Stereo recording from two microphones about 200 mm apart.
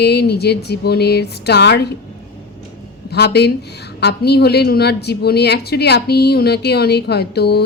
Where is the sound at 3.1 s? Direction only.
55° left (ahead or behind).